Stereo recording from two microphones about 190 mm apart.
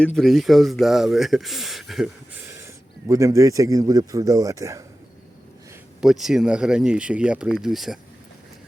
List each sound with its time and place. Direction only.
0.2 s speech: centre (ahead or behind)
3.1 s speech: 15° right (ahead or behind)
6.0 s speech: centre (ahead or behind)